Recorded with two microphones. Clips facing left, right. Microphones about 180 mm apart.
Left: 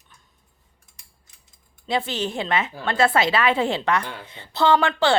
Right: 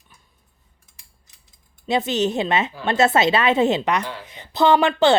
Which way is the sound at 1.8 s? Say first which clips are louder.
Right 5 dB; 20° right (ahead or behind).